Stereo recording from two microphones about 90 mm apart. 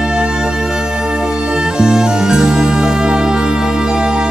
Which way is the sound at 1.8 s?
5° right (ahead or behind).